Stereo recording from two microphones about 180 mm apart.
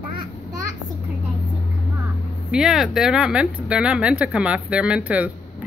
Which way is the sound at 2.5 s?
Centre (ahead or behind).